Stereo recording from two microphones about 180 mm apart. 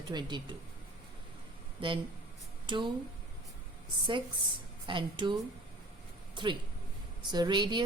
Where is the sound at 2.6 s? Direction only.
25° right (ahead or behind).